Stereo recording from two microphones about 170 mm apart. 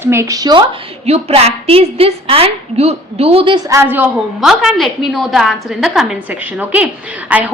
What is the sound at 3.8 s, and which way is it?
Speech, 10° right (ahead or behind).